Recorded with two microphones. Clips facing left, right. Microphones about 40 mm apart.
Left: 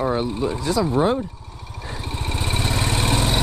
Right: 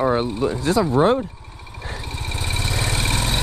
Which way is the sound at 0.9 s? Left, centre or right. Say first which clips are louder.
Right 3 dB; centre.